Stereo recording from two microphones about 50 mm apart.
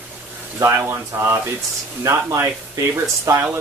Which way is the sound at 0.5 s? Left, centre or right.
Right.